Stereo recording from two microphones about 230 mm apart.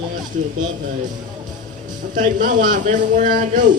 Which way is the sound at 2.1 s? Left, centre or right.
Right.